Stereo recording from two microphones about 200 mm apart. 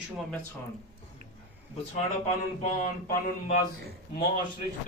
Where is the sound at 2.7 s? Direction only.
40° left (ahead or behind).